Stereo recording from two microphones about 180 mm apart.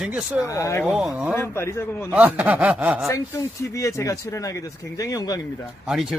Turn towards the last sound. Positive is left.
turn(degrees=0)  # may be behind; listen again after turning